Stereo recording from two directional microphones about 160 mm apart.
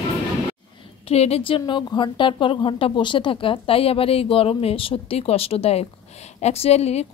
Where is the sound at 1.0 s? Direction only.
40° left (ahead or behind).